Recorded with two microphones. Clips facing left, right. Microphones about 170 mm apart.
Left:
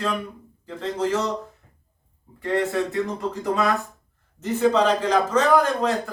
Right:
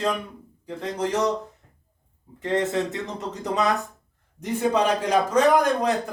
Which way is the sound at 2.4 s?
20° right (ahead or behind).